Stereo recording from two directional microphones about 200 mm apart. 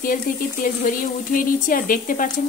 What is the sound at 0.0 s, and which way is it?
Speech, 45° left (ahead or behind).